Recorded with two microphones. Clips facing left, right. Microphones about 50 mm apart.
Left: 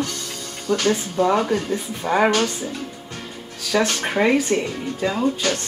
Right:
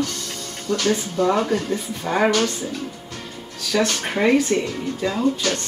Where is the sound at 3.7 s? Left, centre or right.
Centre.